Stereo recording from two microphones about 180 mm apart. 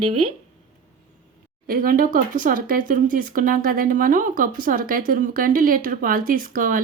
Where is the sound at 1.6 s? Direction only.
50° right (ahead or behind).